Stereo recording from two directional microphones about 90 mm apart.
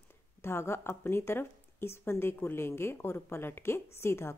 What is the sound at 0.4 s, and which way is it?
Speech, 30° left (ahead or behind).